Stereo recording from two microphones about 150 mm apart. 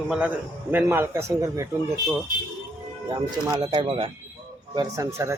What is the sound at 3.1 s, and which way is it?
Speech, 25° right (ahead or behind).